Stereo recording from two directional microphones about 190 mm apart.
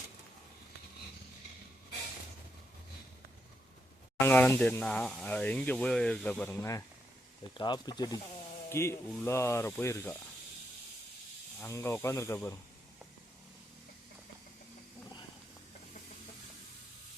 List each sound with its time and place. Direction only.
4.2 s speech: 10° left (ahead or behind)
11.6 s speech: 15° left (ahead or behind)